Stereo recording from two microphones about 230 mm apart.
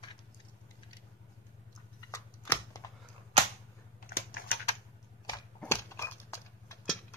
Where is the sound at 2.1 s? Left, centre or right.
Centre.